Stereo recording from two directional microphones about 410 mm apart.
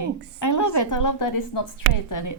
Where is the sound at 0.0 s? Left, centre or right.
Left.